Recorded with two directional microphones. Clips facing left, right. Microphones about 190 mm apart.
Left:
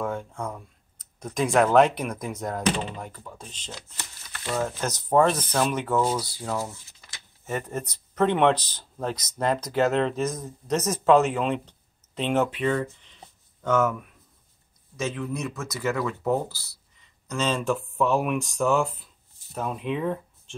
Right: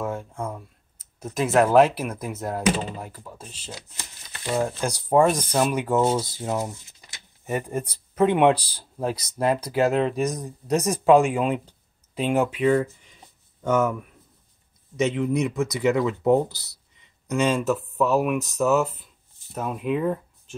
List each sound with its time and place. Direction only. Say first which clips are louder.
0.0 s speech: right 1 dB; 5° right (ahead or behind)
5.9 s speech: right 4 dB; 25° right (ahead or behind); by 13.9 s 10° right (ahead or behind)
15.0 s speech: right 7 dB; 20° right (ahead or behind)